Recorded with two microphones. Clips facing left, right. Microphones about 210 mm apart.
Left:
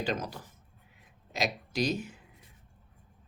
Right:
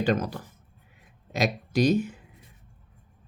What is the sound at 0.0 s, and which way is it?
Speech, 55° right (ahead or behind).